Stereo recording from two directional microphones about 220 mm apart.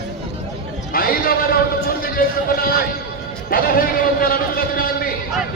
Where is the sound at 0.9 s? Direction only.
40° left (ahead or behind).